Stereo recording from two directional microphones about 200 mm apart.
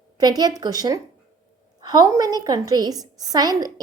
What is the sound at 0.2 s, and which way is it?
A woman's voice, 20° right (ahead or behind).